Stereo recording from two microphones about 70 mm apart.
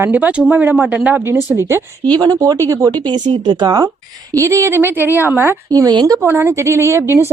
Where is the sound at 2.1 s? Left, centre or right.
Right.